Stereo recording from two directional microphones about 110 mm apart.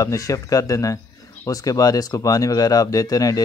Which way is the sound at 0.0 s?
30° left (ahead or behind).